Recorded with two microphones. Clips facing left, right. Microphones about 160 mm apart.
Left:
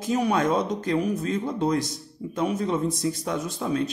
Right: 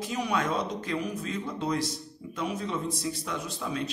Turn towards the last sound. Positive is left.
turn(degrees=45)  # may be behind; listen again after turning